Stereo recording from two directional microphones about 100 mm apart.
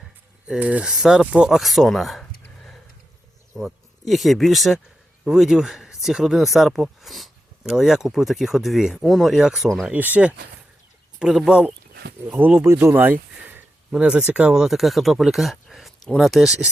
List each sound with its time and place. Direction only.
0.4 s speech: 10° right (ahead or behind)
3.6 s speech: centre (ahead or behind)
9.8 s speech: 15° right (ahead or behind)
13.9 s speech: 10° right (ahead or behind)